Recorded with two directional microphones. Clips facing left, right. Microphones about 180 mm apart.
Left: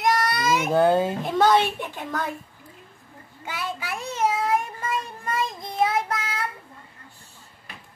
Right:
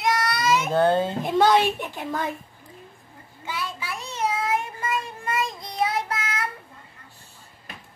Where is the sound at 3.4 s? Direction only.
55° left (ahead or behind).